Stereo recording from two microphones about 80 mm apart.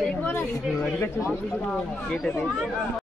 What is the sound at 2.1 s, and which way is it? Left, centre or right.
Speech, centre.